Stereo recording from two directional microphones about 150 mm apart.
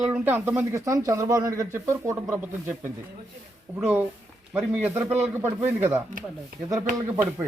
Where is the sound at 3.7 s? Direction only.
10° right (ahead or behind).